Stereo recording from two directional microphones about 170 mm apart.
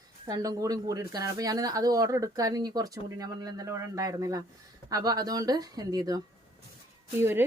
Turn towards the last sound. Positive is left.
turn(degrees=-15)  # may be behind; listen again after turning